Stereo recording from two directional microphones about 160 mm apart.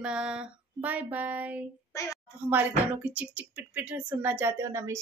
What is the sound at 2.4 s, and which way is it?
Speech, 10° right (ahead or behind).